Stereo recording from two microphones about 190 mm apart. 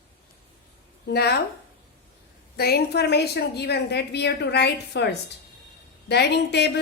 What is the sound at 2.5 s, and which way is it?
A woman's voice, 55° left (ahead or behind).